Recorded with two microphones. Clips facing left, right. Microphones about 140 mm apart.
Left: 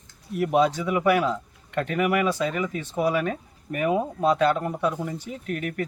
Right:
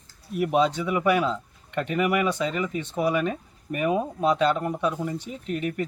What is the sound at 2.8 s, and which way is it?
Speech, 15° left (ahead or behind).